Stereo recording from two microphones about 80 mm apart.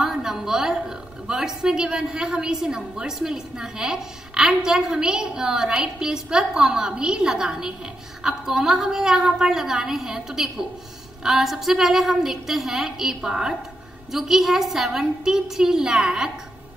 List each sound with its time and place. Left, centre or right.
0.0 s a woman's voice: centre